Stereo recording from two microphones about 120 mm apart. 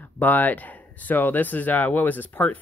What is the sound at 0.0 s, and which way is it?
Speech, 15° left (ahead or behind).